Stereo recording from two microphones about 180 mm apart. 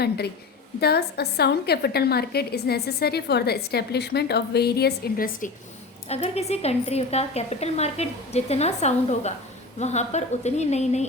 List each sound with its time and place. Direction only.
0.8 s a woman's voice: 65° left (ahead or behind)
6.1 s a woman's voice: 35° left (ahead or behind)